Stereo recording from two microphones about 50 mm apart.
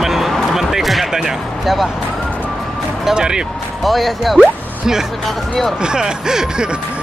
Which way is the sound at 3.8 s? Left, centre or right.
Centre.